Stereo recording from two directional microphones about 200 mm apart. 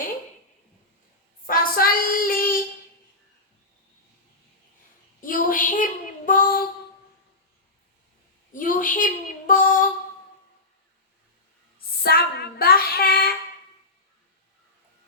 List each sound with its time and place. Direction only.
1.5 s child singing: 45° left (ahead or behind)
5.2 s child singing: 45° left (ahead or behind)
8.5 s a sound: 45° left (ahead or behind)
9.5 s female singing: 40° left (ahead or behind)
12.0 s child singing: 50° left (ahead or behind)